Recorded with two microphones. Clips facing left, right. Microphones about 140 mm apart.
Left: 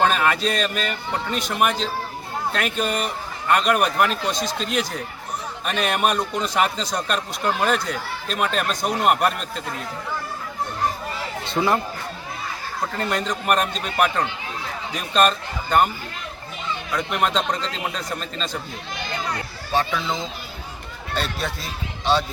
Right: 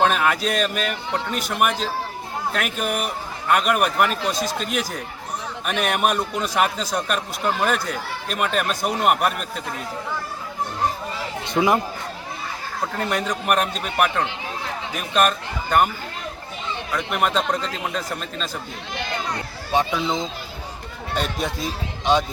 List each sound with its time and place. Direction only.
0.0 s a man's voice: centre (ahead or behind)
11.4 s speech: 15° right (ahead or behind)
12.9 s a man's voice: 10° right (ahead or behind)
16.9 s speech: centre (ahead or behind)
19.7 s a man's voice: 20° right (ahead or behind)